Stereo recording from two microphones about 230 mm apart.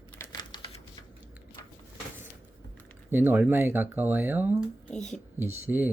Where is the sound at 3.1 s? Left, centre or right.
Centre.